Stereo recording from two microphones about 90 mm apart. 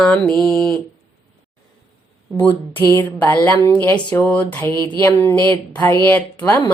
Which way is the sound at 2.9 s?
15° left (ahead or behind).